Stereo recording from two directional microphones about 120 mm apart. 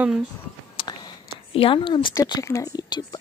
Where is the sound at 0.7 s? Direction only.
40° left (ahead or behind).